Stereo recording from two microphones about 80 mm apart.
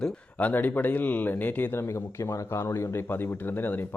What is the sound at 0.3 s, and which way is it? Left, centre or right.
A man's voice, left.